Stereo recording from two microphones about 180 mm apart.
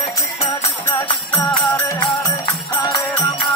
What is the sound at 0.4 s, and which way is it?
Music, 15° left (ahead or behind).